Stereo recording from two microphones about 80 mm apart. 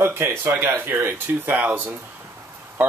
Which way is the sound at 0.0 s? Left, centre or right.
Right.